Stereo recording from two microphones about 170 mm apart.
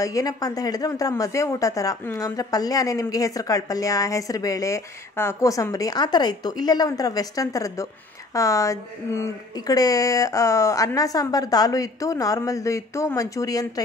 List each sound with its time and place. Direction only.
0.0 s a woman's voice: 20° left (ahead or behind)